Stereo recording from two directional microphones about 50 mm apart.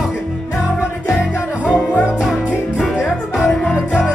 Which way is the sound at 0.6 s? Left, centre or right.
Centre.